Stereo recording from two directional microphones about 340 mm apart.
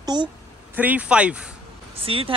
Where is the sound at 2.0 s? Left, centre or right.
Centre.